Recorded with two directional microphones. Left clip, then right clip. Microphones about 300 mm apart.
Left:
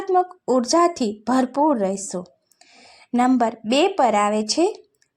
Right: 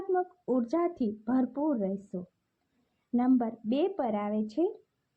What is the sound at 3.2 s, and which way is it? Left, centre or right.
A woman's voice, centre.